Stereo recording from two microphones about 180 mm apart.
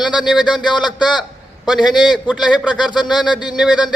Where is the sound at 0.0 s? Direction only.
5° right (ahead or behind).